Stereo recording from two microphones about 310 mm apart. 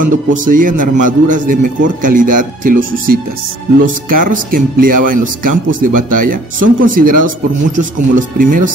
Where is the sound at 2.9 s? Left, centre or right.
Right.